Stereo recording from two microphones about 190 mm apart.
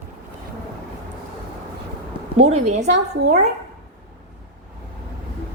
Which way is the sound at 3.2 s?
35° right (ahead or behind).